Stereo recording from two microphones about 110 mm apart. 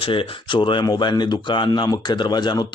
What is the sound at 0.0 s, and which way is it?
Speech, 55° left (ahead or behind).